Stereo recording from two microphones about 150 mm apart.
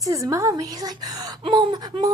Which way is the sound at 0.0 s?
20° right (ahead or behind).